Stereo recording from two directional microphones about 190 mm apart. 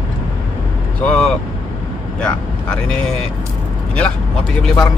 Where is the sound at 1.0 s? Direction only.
5° left (ahead or behind).